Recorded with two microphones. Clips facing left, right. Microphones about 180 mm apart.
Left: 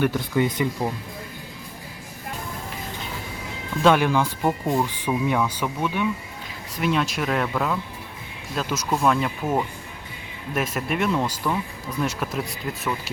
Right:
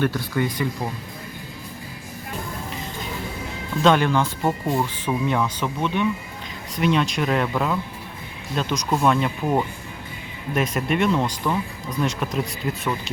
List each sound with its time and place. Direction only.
0.0 s speech: 15° left (ahead or behind)
3.8 s speech: 10° left (ahead or behind)